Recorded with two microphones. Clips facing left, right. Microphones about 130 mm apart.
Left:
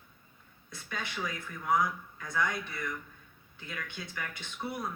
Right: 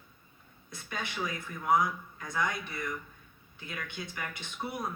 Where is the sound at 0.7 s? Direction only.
15° right (ahead or behind).